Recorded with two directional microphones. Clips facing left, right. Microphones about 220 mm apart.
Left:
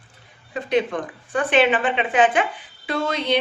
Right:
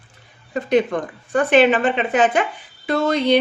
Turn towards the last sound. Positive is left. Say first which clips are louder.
# right 5 dB
turn(degrees=-40)  # may be behind; listen again after turning